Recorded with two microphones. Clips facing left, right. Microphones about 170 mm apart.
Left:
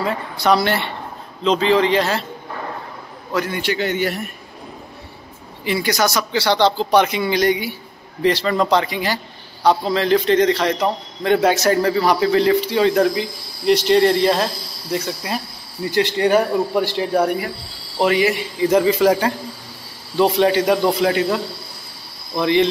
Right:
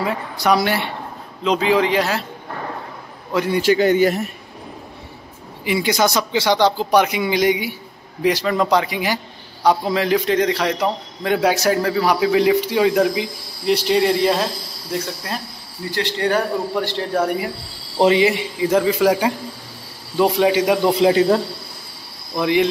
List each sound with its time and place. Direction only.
0.0 s speech: 10° right (ahead or behind)
3.4 s a man's voice: 35° right (ahead or behind)
5.7 s a man's voice: 15° right (ahead or behind); by 15.4 s 5° left (ahead or behind)
15.9 s a man's voice: 15° left (ahead or behind)
17.9 s a man's voice: 25° right (ahead or behind)
18.6 s a man's voice: centre (ahead or behind)
21.0 s a man's voice: 25° right (ahead or behind)
22.3 s speech: 5° right (ahead or behind)